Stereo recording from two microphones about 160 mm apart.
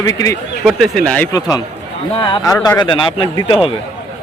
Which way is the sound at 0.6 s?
Centre (ahead or behind).